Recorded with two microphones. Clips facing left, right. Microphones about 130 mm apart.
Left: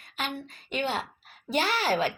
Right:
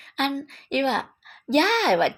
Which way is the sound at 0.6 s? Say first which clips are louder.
Right 6 dB; 80° right.